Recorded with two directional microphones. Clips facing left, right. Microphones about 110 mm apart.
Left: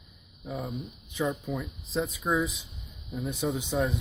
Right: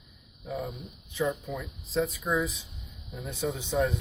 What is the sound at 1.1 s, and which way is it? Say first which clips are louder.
Speech: even; 15° left (ahead or behind).